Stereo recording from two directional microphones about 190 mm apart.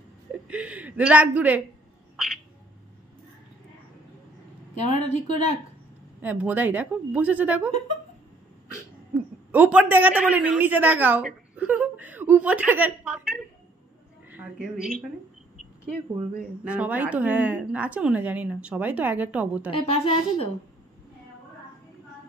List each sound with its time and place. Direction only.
0.5 s a man's voice: 5° right (ahead or behind)
4.8 s a woman's voice: 35° left (ahead or behind)
6.2 s a woman's voice: 10° right (ahead or behind)
9.5 s a woman's voice: 5° right (ahead or behind)
16.3 s a woman's voice: 5° right (ahead or behind)
19.7 s a woman's voice: 30° left (ahead or behind)